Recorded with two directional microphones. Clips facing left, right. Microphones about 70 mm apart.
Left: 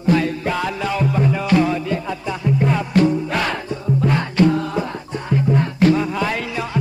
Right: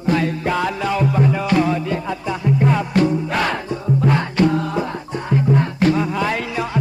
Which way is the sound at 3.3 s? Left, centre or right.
Right.